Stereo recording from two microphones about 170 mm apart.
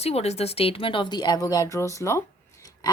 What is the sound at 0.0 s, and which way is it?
A woman's voice, 35° left (ahead or behind).